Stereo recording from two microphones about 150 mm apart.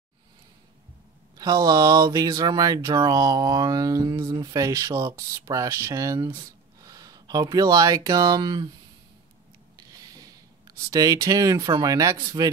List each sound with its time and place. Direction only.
1.4 s speech: 25° right (ahead or behind)
9.8 s a sound: 25° right (ahead or behind)
10.9 s speech: 25° right (ahead or behind)